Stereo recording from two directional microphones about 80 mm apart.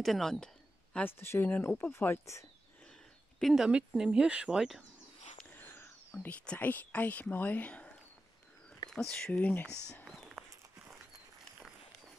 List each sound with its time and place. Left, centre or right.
0.0 s speech: centre
1.0 s speech: left
1.9 s speech: left
3.3 s speech: centre
3.6 s speech: centre
5.5 s a sound: left
6.2 s speech: centre
10.0 s a sound: centre